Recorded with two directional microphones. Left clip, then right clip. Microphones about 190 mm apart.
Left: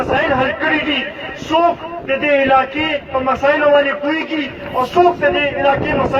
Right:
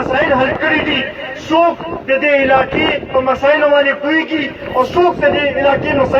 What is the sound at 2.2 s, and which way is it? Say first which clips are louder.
A man's voice: right 1 dB; 15° left (ahead or behind).